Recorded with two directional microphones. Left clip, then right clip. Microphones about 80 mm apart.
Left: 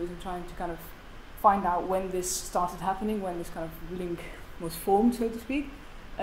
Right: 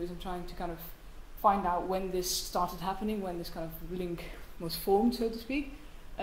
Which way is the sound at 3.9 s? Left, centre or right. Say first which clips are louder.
Even; left.